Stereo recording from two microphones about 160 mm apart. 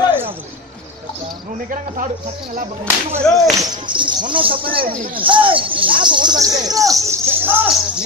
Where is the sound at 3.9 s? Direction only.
30° right (ahead or behind).